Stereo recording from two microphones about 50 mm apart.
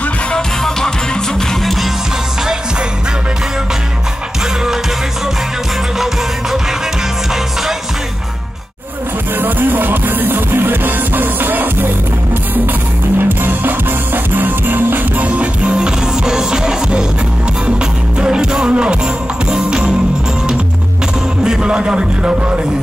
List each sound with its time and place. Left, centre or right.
0.3 s music: centre
9.4 s music: right
13.2 s music: right
15.2 s music: right
18.2 s music: centre
21.5 s music: centre